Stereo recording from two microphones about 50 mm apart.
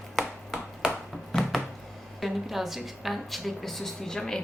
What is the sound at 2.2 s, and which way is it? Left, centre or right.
A woman's voice, centre.